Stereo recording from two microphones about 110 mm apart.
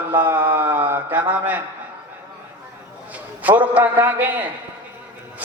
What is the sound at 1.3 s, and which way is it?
Speech, 15° right (ahead or behind).